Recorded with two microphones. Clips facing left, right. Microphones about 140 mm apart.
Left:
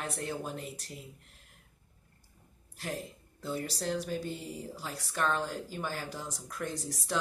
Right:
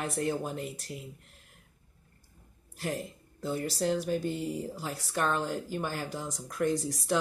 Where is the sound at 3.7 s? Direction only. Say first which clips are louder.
Right 7 dB; 10° right (ahead or behind).